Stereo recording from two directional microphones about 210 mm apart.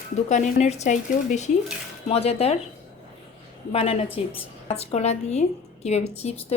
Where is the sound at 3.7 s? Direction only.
30° left (ahead or behind).